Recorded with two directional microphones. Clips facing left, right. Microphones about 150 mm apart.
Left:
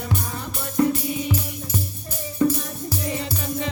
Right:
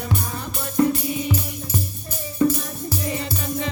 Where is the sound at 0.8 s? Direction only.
30° right (ahead or behind).